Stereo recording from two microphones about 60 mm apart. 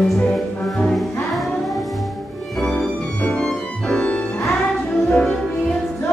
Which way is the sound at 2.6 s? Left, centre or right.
Centre.